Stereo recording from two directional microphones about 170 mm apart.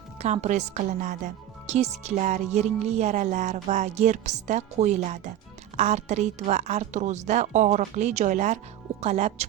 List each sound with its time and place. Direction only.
0.2 s a woman's voice: 40° right (ahead or behind)